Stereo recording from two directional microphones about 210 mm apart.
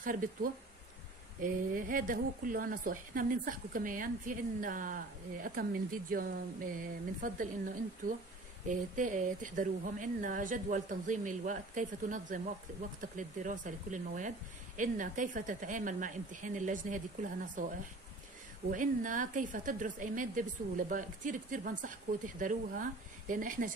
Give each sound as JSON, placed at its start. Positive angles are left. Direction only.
{"t": 0.0, "sound": "a woman's voice", "side_deg": -40}
{"t": 8.6, "sound": "a woman's voice", "side_deg": -40}